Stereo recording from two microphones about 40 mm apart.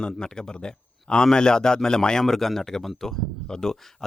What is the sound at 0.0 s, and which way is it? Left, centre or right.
A man's voice, centre.